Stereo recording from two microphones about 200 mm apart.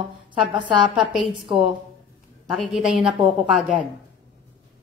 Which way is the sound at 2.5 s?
Centre (ahead or behind).